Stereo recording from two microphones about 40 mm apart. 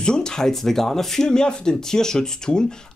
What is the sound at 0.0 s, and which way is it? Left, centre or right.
Speech, centre.